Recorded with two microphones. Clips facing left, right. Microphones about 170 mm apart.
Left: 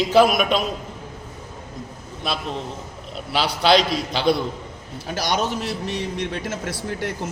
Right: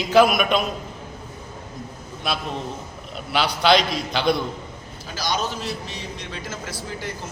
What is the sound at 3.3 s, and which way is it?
Speech, centre (ahead or behind).